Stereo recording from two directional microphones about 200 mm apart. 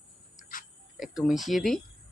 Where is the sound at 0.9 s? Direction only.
Centre (ahead or behind).